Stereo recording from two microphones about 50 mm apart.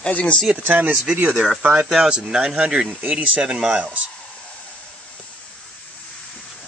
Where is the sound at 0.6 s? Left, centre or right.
Right.